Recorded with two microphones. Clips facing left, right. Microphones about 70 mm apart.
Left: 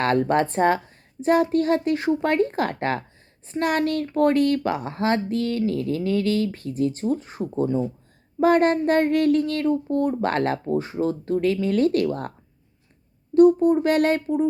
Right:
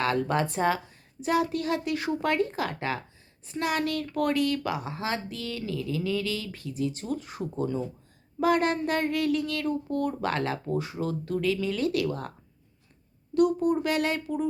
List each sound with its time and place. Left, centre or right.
0.0 s speech: left
13.3 s speech: left
13.8 s speech: left